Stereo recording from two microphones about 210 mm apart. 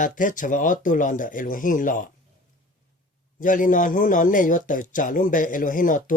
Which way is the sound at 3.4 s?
40° left (ahead or behind).